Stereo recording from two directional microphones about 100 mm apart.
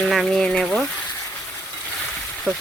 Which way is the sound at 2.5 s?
15° right (ahead or behind).